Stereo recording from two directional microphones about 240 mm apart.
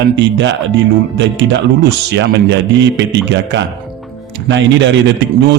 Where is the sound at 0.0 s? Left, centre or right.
Right.